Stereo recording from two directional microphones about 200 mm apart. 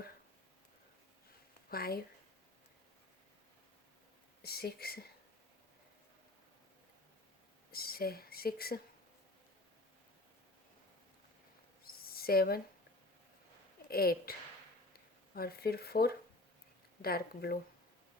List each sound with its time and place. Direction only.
1.7 s speech: 50° left (ahead or behind)
4.4 s speech: 50° left (ahead or behind)
7.7 s speech: 50° left (ahead or behind)
11.8 s a sound: 50° left (ahead or behind)
13.8 s speech: 50° left (ahead or behind)
15.4 s speech: 50° left (ahead or behind)